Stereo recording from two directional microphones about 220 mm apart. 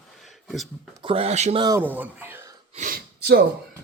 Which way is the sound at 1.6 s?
10° right (ahead or behind).